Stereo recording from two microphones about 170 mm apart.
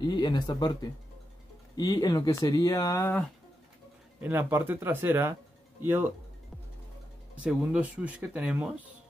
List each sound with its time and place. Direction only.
0.0 s speech: 25° left (ahead or behind)
4.2 s speech: 15° right (ahead or behind)
7.3 s speech: 5° right (ahead or behind)